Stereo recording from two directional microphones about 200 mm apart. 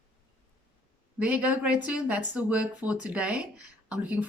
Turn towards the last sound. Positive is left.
turn(degrees=-5)  # may be behind; listen again after turning